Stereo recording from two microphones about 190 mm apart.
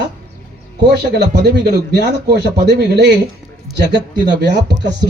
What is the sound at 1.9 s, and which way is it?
Speech, 60° right (ahead or behind).